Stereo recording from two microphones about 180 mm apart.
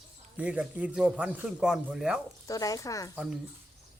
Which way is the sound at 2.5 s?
20° left (ahead or behind).